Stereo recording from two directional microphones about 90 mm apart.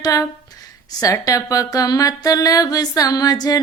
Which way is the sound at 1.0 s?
40° left (ahead or behind).